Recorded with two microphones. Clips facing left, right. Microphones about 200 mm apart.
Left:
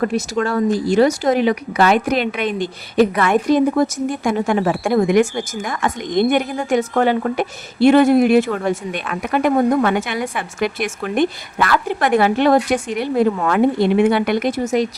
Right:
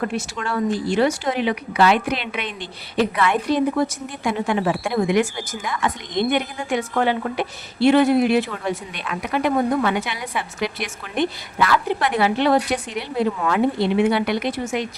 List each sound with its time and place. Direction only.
0.0 s speech: 40° left (ahead or behind)